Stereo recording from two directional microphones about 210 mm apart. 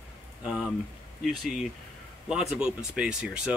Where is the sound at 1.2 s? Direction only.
Centre (ahead or behind).